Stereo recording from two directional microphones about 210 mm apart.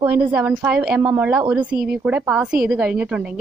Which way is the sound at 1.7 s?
50° right (ahead or behind).